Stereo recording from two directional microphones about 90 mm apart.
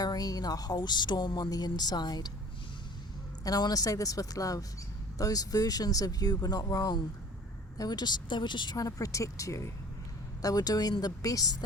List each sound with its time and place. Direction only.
0.0 s speech: 45° left (ahead or behind)
3.4 s speech: 45° left (ahead or behind)
8.8 s speech: 35° left (ahead or behind)